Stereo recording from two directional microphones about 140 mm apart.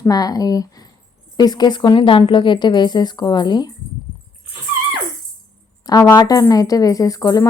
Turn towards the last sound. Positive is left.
turn(degrees=25)  # may be behind; listen again after turning